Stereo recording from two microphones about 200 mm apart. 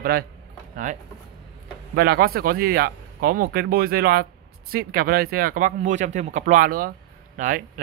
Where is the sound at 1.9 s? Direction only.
50° right (ahead or behind).